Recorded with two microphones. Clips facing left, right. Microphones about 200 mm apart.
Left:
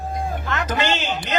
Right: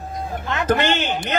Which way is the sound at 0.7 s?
55° right (ahead or behind).